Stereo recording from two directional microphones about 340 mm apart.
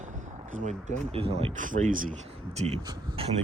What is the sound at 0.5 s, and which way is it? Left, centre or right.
Speech, right.